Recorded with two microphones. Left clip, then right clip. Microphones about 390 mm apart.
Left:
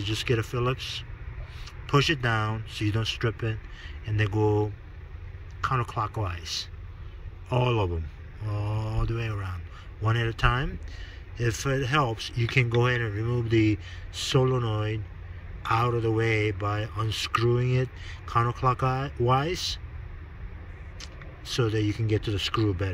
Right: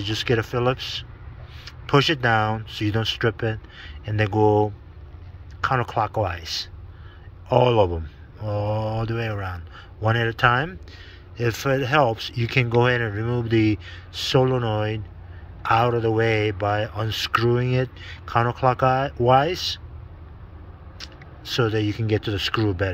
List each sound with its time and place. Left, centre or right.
0.0 s speech: centre
21.0 s speech: centre